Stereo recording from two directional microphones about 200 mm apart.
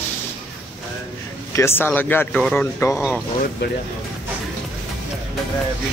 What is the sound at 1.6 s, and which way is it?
Speech, 10° left (ahead or behind).